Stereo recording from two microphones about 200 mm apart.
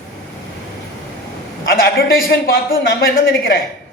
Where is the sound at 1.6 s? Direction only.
50° left (ahead or behind).